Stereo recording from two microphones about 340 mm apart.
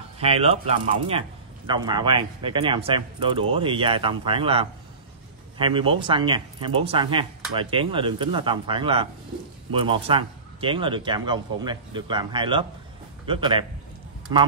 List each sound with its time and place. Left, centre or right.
0.2 s speech: centre